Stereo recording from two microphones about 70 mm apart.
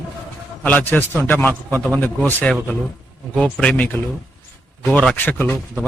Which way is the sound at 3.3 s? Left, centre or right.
Centre.